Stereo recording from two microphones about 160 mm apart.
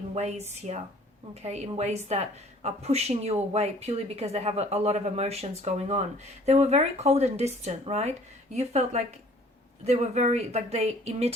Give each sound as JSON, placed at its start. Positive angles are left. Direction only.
{"t": 0.1, "sound": "a woman's voice", "side_deg": -45}